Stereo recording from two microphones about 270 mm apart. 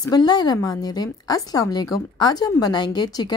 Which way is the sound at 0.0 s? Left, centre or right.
Centre.